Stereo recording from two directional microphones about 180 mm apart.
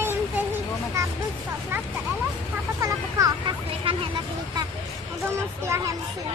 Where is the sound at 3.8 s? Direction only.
30° right (ahead or behind).